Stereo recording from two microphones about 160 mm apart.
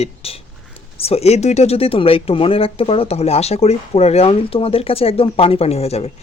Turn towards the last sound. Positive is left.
turn(degrees=40)  # may be behind; listen again after turning